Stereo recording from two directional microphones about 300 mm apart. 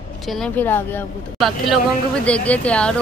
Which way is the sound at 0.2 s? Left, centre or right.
Centre.